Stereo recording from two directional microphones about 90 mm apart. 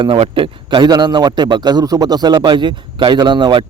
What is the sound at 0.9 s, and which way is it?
A man's voice, 50° right (ahead or behind).